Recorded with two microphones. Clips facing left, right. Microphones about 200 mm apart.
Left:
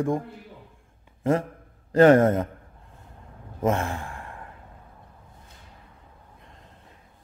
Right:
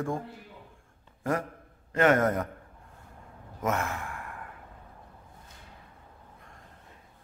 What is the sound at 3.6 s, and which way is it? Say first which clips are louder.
Sigh: left 5 dB; 30° left (ahead or behind).